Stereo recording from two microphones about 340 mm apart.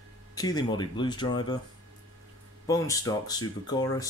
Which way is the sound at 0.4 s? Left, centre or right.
Centre.